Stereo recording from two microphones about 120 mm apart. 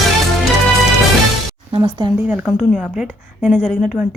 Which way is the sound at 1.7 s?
40° right (ahead or behind).